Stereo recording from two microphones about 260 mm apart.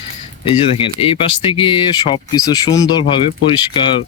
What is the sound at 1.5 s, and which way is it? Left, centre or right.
Speech, centre.